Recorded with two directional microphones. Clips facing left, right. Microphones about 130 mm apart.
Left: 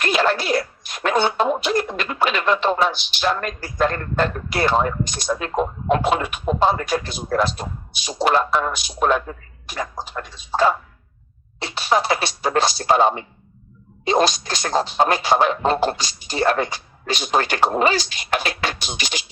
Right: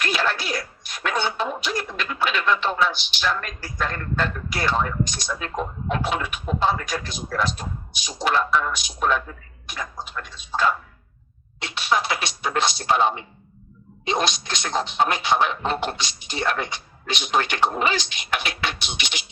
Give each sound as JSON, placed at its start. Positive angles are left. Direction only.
{"t": 0.0, "sound": "a sound", "side_deg": 45}
{"t": 1.0, "sound": "speech", "side_deg": 50}
{"t": 8.3, "sound": "speech", "side_deg": 40}
{"t": 9.7, "sound": "speech", "side_deg": 35}